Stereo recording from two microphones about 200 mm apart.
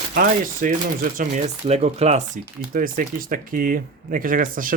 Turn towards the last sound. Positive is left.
turn(degrees=-45)  # may be behind; listen again after turning